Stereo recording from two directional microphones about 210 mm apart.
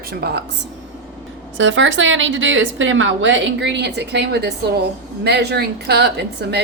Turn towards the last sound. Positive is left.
turn(degrees=-50)  # may be behind; listen again after turning